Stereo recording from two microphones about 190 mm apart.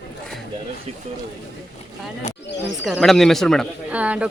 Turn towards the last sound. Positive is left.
turn(degrees=-5)  # may be behind; listen again after turning